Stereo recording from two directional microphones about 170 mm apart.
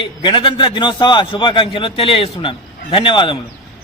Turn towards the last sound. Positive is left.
turn(degrees=30)  # may be behind; listen again after turning